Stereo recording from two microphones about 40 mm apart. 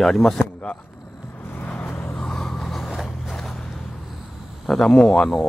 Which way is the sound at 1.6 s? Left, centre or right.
Left.